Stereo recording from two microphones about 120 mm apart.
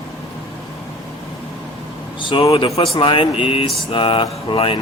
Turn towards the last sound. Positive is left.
turn(degrees=50)  # may be behind; listen again after turning